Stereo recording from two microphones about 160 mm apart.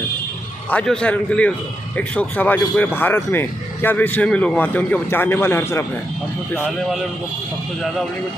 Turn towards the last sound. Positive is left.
turn(degrees=0)  # may be behind; listen again after turning